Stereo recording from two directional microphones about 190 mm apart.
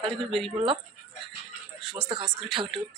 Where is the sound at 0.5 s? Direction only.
30° right (ahead or behind).